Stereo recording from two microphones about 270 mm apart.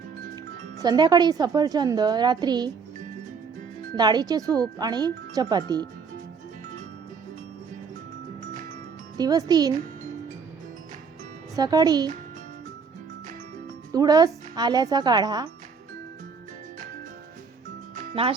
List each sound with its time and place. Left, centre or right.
0.8 s a woman's voice: centre
3.9 s a woman's voice: centre
9.1 s a woman's voice: centre
11.5 s a woman's voice: centre
13.9 s a woman's voice: centre
17.9 s music: centre